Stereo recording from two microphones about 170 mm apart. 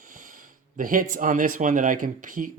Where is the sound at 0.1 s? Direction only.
55° right (ahead or behind).